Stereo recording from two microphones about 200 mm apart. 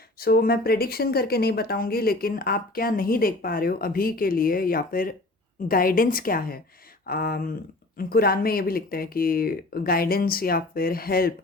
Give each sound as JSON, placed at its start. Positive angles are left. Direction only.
{"t": 0.2, "sound": "speech", "side_deg": 50}